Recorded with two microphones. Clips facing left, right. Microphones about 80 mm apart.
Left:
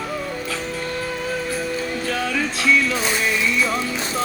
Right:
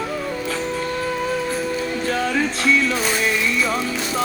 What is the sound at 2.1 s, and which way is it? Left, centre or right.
Music, right.